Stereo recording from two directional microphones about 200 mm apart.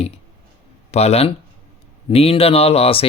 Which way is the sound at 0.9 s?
30° left (ahead or behind).